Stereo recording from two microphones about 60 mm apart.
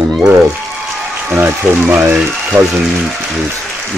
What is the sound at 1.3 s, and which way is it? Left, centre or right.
Speech, right.